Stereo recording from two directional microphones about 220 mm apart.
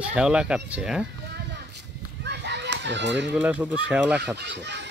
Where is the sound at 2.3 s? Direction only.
50° right (ahead or behind).